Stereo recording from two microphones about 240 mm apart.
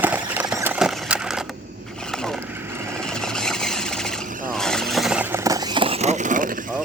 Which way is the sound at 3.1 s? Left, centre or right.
Centre.